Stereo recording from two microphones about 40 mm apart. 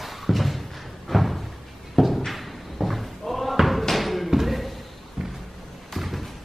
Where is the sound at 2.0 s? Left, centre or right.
Centre.